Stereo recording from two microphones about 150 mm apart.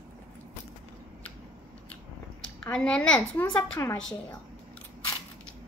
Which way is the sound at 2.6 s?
5° left (ahead or behind).